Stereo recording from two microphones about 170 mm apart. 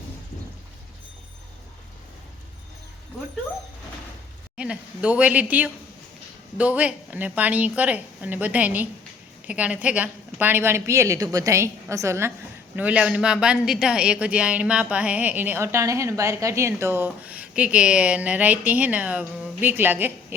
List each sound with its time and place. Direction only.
4.5 s a woman's voice: 5° right (ahead or behind)